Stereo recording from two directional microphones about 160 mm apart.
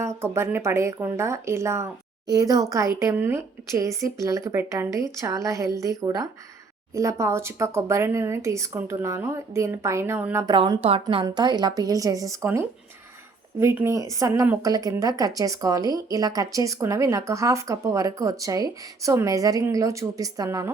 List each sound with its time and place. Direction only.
0.0 s speech: 15° right (ahead or behind)
10.4 s speech: 30° right (ahead or behind)